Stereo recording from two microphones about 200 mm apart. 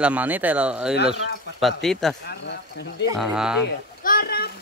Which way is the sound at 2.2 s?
60° left (ahead or behind).